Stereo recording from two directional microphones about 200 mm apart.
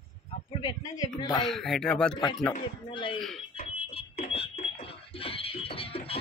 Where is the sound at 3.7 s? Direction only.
30° left (ahead or behind).